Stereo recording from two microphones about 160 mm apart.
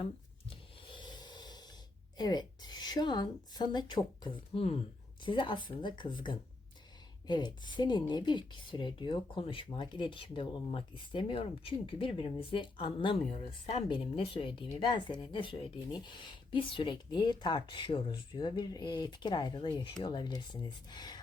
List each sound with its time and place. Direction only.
0.9 s snort: 30° left (ahead or behind)
2.1 s speech: 25° left (ahead or behind)